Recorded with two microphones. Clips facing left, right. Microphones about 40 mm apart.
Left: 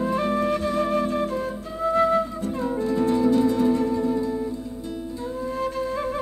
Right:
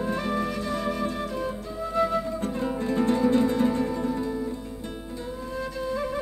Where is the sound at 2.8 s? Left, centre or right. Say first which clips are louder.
Left 2 dB; right.